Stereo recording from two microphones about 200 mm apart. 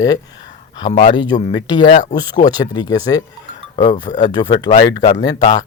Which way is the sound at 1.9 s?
40° left (ahead or behind).